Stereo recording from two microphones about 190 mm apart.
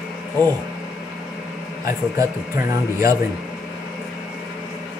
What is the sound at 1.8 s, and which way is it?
Speech, 15° right (ahead or behind).